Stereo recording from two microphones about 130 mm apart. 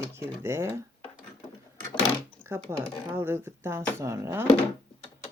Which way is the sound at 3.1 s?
20° right (ahead or behind).